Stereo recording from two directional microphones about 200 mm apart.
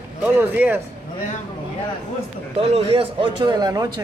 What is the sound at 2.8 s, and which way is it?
A man's voice, 25° right (ahead or behind).